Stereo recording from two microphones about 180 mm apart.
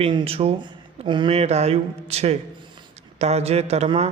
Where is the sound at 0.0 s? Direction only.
30° right (ahead or behind).